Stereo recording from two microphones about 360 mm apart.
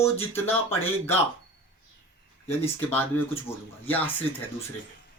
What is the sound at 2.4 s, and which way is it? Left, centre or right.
Speech, centre.